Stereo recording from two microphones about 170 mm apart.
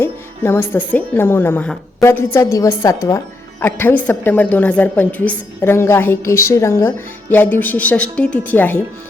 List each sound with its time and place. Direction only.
0.0 s a woman's voice: 15° left (ahead or behind)